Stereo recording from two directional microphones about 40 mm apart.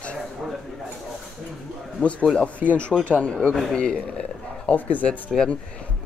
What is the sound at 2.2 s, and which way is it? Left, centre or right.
Speech, left.